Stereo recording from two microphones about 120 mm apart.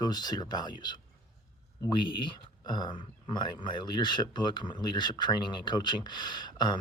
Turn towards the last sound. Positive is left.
turn(degrees=40)  # may be behind; listen again after turning